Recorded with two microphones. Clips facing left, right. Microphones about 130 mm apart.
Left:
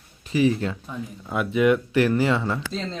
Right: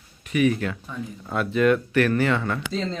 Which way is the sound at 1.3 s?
15° left (ahead or behind).